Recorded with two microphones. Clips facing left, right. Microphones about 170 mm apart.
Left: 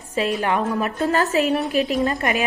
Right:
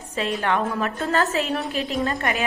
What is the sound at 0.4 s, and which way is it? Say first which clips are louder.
A woman's voice: left 2 dB; 15° left (ahead or behind).